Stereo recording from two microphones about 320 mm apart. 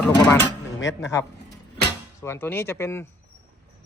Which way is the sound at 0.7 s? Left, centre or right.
Left.